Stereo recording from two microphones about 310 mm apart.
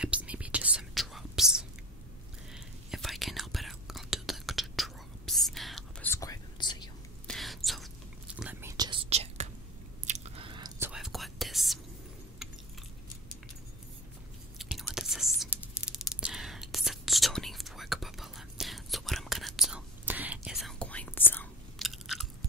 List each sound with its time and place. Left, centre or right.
0.0 s whispering: centre
7.2 s whispering: centre
10.9 s whispering: centre
14.6 s whispering: centre